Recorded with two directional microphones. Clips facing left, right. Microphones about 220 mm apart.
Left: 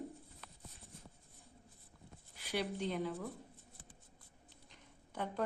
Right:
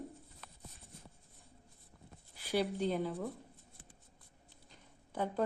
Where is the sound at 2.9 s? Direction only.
30° right (ahead or behind).